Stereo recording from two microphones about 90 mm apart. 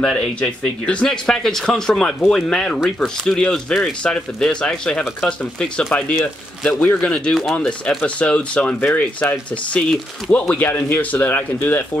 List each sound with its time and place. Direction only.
0.0 s speech: 10° left (ahead or behind)